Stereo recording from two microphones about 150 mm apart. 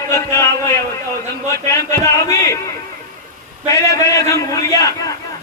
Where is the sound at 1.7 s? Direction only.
20° left (ahead or behind).